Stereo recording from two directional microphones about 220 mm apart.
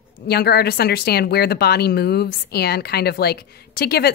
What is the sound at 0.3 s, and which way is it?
Speech, 45° left (ahead or behind).